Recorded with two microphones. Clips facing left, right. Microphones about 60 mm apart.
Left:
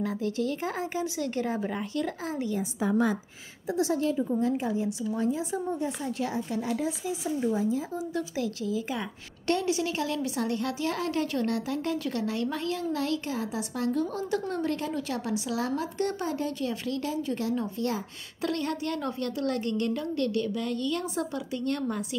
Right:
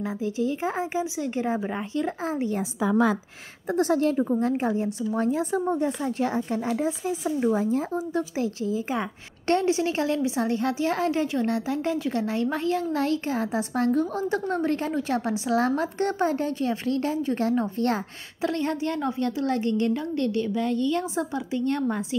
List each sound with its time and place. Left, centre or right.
0.0 s a woman's voice: centre
3.7 s speech: right
6.0 s a woman's voice: right
8.1 s a woman's voice: right
18.4 s a woman's voice: right